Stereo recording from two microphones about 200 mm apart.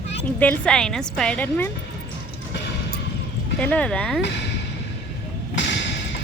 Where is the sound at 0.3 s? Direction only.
10° left (ahead or behind).